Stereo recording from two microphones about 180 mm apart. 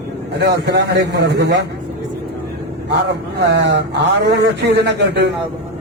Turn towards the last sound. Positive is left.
turn(degrees=-70)  # may be behind; listen again after turning